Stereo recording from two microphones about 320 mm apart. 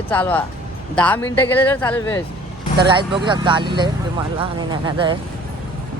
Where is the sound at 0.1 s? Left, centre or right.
Centre.